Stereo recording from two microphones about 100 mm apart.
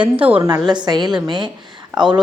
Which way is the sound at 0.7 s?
45° right (ahead or behind).